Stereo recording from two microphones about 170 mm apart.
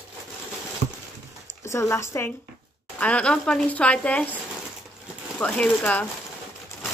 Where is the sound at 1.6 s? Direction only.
15° left (ahead or behind).